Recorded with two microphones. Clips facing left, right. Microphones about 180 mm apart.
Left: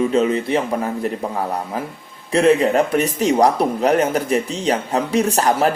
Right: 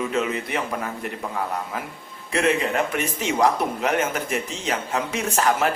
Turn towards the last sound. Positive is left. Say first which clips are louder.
# left 5 dB
turn(degrees=35)  # may be behind; listen again after turning